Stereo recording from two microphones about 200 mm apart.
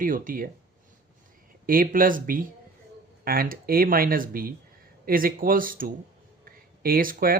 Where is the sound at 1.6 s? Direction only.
45° right (ahead or behind).